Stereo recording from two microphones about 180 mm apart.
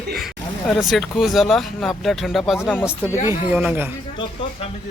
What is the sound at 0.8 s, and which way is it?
Speech, centre (ahead or behind).